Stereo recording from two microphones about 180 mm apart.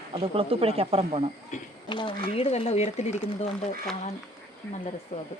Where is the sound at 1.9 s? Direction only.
25° left (ahead or behind).